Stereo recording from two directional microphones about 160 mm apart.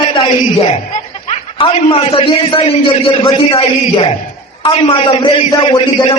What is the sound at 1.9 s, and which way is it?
A man's voice, 35° left (ahead or behind).